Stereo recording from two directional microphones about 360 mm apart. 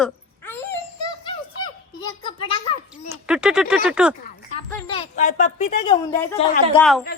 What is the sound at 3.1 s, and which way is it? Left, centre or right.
A woman's voice, centre.